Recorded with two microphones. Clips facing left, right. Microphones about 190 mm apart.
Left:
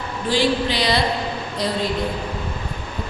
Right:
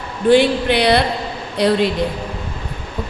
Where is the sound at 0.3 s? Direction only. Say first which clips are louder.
Right 7 dB; 60° right (ahead or behind).